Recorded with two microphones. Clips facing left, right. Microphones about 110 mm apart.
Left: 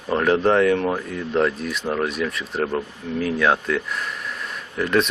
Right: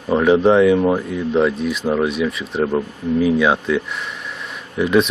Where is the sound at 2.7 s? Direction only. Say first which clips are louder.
Right 6 dB; 15° right (ahead or behind).